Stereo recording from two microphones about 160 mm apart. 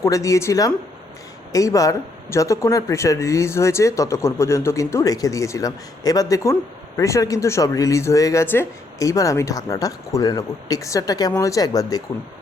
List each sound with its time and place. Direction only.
0.0 s speech: 20° left (ahead or behind)